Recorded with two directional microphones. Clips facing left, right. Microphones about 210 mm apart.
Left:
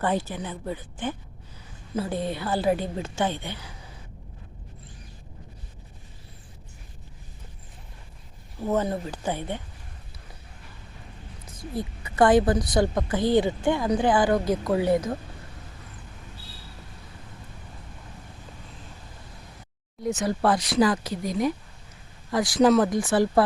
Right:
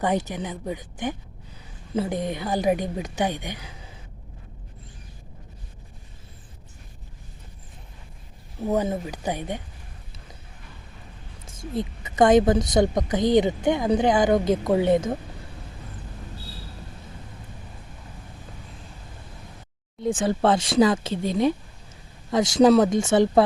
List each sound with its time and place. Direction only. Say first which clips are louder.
0.0 s a woman's voice: right 2 dB; 15° right (ahead or behind)
8.6 s a woman's voice: right 1 dB; 15° right (ahead or behind)
11.6 s a woman's voice: right 3 dB; 20° right (ahead or behind)
20.0 s a woman's voice: right 3 dB; 30° right (ahead or behind)